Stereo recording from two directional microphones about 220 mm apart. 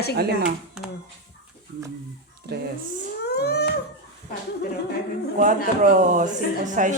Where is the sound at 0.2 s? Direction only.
45° right (ahead or behind).